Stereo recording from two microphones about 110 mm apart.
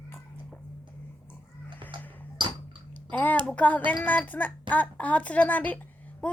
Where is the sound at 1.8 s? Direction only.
50° right (ahead or behind).